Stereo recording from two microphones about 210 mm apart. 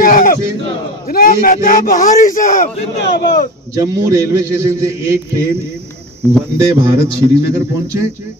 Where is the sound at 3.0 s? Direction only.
55° left (ahead or behind).